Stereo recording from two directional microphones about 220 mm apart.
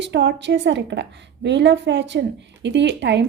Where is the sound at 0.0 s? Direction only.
50° right (ahead or behind).